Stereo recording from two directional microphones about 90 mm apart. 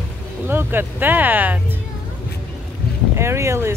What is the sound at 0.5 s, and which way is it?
Speech, 25° right (ahead or behind).